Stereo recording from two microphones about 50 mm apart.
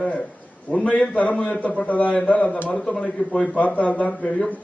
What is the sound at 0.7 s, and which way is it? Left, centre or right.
A man's voice, left.